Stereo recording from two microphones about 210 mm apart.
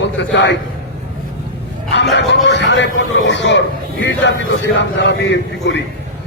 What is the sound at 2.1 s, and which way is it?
A man's voice, 55° left (ahead or behind).